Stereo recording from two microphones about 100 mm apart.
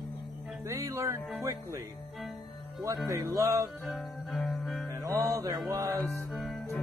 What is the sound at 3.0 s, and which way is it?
Music, 35° right (ahead or behind).